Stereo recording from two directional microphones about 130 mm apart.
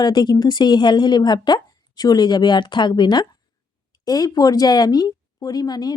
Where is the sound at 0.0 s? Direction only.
35° left (ahead or behind).